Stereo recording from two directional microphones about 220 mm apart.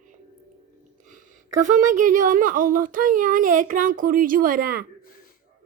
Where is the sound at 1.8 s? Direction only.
35° right (ahead or behind).